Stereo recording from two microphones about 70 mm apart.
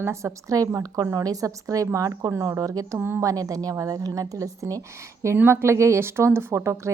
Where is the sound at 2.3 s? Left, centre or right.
Right.